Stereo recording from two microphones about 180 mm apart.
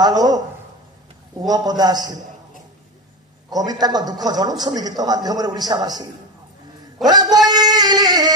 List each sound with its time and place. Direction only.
0.0 s a man's voice: 20° right (ahead or behind)
1.4 s a man's voice: 20° right (ahead or behind)
3.4 s a man's voice: 20° right (ahead or behind)
7.1 s a man's voice: 20° right (ahead or behind)